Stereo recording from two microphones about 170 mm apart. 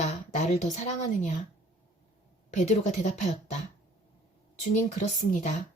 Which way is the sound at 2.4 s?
40° left (ahead or behind).